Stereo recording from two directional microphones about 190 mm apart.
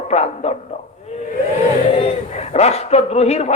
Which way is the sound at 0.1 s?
35° left (ahead or behind).